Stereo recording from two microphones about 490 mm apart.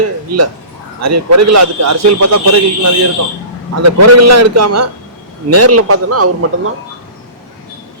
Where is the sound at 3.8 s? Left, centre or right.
Right.